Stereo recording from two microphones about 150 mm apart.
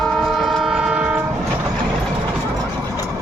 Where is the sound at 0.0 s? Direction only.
Centre (ahead or behind).